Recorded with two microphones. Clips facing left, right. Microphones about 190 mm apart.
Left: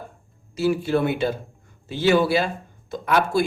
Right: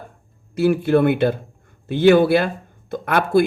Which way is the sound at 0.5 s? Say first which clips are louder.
Right 5 dB; 55° right (ahead or behind).